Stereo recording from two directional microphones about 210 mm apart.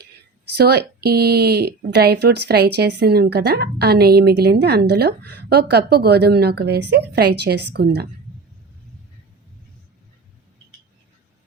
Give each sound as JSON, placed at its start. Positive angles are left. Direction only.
{"t": 0.5, "sound": "a woman's voice", "side_deg": -50}